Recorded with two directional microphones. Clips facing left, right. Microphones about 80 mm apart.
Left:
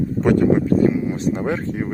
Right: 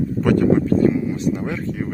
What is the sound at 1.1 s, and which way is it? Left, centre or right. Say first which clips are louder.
Speech: left 1 dB; left.